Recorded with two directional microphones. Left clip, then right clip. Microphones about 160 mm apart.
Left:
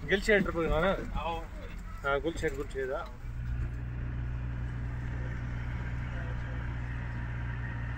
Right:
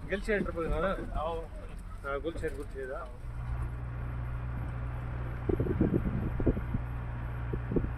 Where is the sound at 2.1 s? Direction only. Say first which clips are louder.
Left 4 dB; 20° left (ahead or behind).